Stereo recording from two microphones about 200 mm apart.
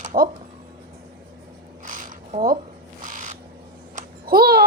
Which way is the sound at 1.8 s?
40° right (ahead or behind).